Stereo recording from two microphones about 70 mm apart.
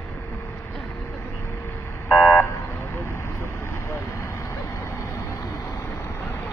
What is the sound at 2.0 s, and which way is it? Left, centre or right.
Vehicle, left.